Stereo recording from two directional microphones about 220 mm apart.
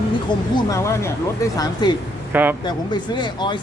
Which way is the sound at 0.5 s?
15° left (ahead or behind).